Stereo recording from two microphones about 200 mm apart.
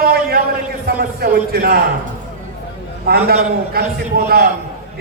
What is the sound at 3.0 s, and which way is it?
A man's voice, 50° right (ahead or behind).